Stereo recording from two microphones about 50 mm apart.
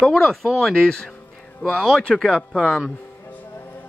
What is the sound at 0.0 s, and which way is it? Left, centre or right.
Speech, centre.